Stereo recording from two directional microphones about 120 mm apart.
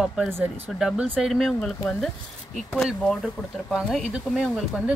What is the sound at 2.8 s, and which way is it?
Speech, centre (ahead or behind).